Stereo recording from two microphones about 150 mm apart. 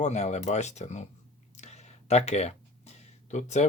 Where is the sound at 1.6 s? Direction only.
50° left (ahead or behind).